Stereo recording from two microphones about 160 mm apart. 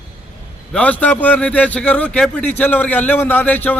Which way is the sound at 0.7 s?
10° left (ahead or behind).